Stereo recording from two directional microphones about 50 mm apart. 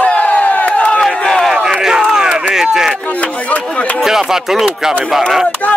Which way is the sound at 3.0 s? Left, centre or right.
Left.